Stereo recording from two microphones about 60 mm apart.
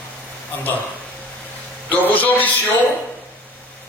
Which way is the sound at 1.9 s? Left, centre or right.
Left.